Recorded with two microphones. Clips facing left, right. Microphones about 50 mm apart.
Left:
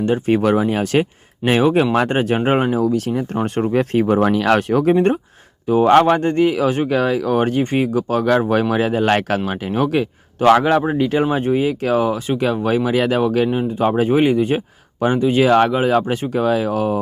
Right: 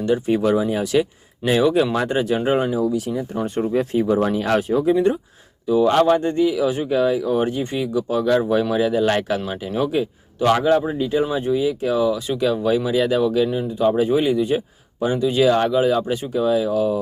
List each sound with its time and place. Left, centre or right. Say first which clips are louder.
0.0 s speech: left 2 dB; left
2.0 s speech: left 3 dB; left
2.8 s speech: left 3 dB; left
5.6 s speech: left 3 dB; left